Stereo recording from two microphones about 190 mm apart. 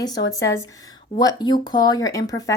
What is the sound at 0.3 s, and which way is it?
Speech, 15° left (ahead or behind).